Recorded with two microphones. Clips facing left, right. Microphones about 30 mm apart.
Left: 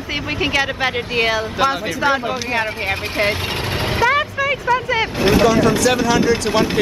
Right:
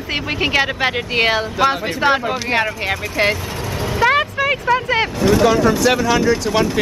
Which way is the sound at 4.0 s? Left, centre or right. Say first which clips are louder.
Right 2 dB; centre.